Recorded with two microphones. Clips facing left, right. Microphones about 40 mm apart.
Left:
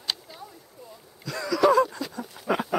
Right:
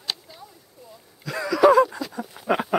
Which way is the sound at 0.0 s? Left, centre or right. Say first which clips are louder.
Even; centre.